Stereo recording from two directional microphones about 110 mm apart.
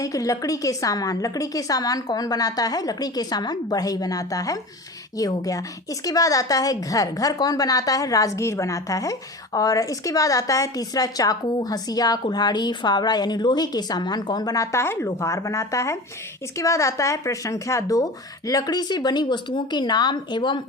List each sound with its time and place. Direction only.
0.0 s a woman's voice: 30° left (ahead or behind)